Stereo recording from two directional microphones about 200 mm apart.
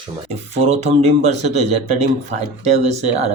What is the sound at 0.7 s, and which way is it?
Speech, 35° right (ahead or behind).